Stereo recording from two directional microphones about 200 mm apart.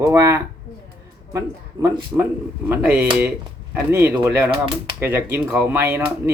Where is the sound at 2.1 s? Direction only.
15° right (ahead or behind).